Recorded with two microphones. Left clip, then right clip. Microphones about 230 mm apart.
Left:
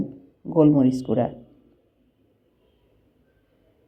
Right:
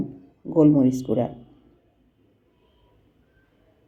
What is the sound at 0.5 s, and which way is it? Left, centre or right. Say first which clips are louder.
Speech: even; centre.